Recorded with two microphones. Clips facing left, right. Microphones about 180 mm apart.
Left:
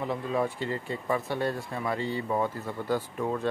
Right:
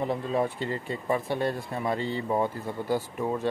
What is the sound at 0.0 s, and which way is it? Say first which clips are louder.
Speech: right 2 dB; 25° right (ahead or behind).